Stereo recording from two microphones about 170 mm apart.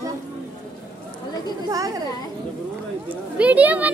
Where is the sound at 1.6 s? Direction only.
20° right (ahead or behind).